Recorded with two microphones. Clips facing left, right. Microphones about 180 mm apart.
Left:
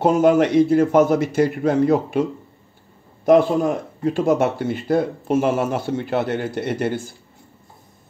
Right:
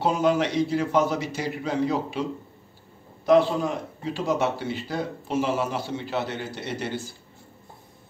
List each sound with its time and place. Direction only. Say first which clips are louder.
0.0 s speech: left 7 dB; 50° left (ahead or behind)
3.3 s speech: left 5 dB; 50° left (ahead or behind)